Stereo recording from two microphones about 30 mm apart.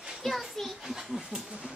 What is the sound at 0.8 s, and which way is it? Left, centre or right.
Speech, centre.